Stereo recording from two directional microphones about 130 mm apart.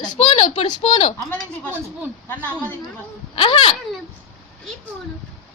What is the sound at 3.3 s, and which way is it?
Speech, 45° left (ahead or behind).